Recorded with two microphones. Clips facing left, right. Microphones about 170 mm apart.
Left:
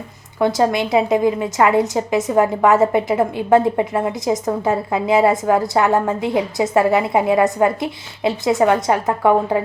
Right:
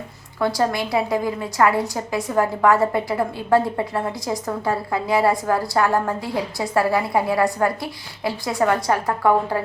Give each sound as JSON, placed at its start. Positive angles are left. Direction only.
{"t": 0.3, "sound": "a woman's voice", "side_deg": 20}